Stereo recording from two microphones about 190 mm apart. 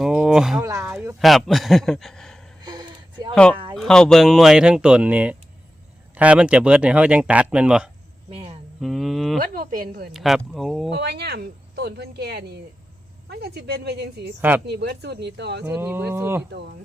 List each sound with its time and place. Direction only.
0.0 s a sound: 5° right (ahead or behind)
0.6 s speech: 15° right (ahead or behind)
1.2 s a man's voice: centre (ahead or behind)
2.6 s a sound: 25° right (ahead or behind)
3.8 s speech: 5° left (ahead or behind)
8.3 s speech: 30° right (ahead or behind)
8.8 s speech: centre (ahead or behind)
9.4 s a woman's voice: 45° right (ahead or behind)
10.1 s speech: centre (ahead or behind)
11.0 s speech: 60° right (ahead or behind)
15.6 s speech: 10° right (ahead or behind)